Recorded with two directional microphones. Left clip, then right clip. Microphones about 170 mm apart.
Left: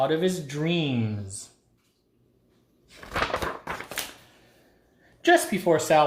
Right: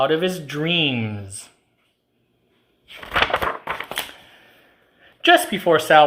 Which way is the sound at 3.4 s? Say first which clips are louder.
Right 7 dB; 5° right (ahead or behind).